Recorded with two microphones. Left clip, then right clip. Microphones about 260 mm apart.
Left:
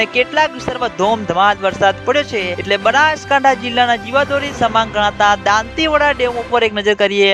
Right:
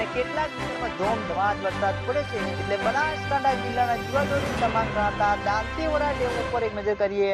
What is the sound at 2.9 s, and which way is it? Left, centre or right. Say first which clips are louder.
Music: left 15 dB; left.